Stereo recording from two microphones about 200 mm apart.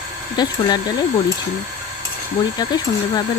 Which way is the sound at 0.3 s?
20° left (ahead or behind).